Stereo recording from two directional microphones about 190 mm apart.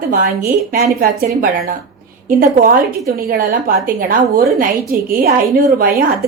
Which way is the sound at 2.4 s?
45° right (ahead or behind).